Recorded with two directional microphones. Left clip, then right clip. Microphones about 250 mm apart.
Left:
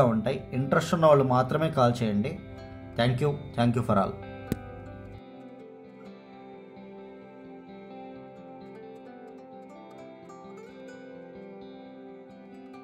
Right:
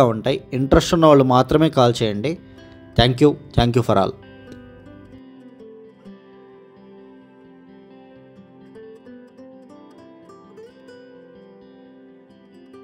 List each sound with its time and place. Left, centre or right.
0.0 s speech: right